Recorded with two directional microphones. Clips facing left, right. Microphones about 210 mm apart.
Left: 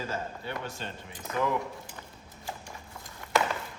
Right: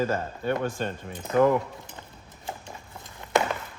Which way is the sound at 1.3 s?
25° right (ahead or behind).